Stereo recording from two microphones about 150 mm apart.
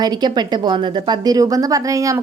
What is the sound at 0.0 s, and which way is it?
A woman's voice, 25° right (ahead or behind).